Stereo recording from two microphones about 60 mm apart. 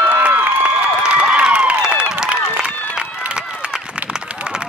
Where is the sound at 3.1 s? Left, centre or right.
Centre.